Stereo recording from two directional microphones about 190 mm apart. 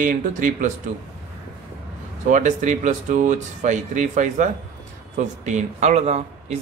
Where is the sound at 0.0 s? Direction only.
45° right (ahead or behind).